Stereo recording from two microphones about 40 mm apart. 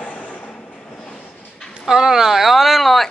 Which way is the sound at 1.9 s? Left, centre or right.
Centre.